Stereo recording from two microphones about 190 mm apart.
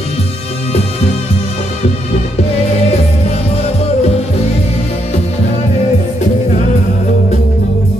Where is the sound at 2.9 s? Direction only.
35° left (ahead or behind).